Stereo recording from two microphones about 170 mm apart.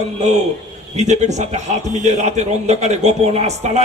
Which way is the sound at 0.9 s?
40° right (ahead or behind).